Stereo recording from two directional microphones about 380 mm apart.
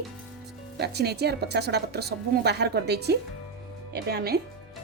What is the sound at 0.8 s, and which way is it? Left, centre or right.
Speech, right.